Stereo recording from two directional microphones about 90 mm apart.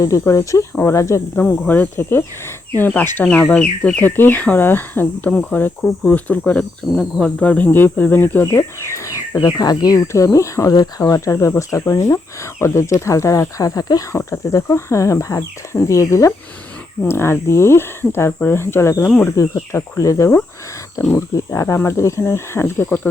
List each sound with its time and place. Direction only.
0.0 s speech: 40° left (ahead or behind)
1.4 s speech: 20° left (ahead or behind); by 10.0 s 45° left (ahead or behind)
10.1 s speech: 35° left (ahead or behind)
14.2 s speech: 35° left (ahead or behind)